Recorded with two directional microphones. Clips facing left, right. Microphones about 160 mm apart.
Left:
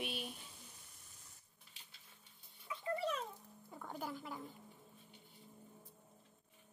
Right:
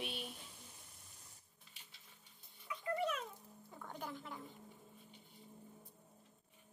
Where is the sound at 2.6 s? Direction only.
30° left (ahead or behind).